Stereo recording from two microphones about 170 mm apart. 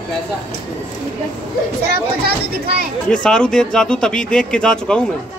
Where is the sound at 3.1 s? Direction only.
5° left (ahead or behind).